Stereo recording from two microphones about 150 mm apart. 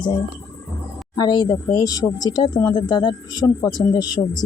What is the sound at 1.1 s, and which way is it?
Speech, 30° left (ahead or behind).